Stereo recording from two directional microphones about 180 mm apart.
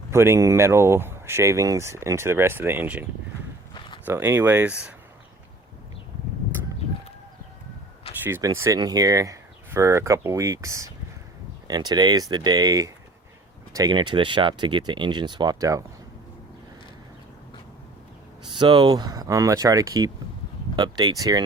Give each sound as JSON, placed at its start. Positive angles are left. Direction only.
{"t": 0.1, "sound": "speech", "side_deg": -15}
{"t": 3.8, "sound": "a sound", "side_deg": 30}
{"t": 4.0, "sound": "speech", "side_deg": -15}
{"t": 8.2, "sound": "speech", "side_deg": -15}
{"t": 18.4, "sound": "speech", "side_deg": -25}